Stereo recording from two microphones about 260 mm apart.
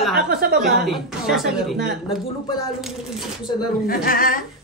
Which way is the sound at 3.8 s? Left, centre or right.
Left.